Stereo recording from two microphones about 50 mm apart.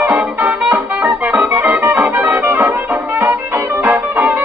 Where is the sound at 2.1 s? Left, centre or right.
Right.